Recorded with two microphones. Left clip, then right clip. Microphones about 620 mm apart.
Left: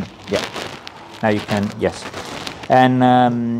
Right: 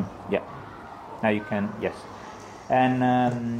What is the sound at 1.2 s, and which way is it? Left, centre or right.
Speech, left.